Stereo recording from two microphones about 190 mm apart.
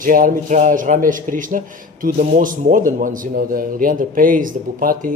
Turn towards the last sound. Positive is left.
turn(degrees=-45)  # may be behind; listen again after turning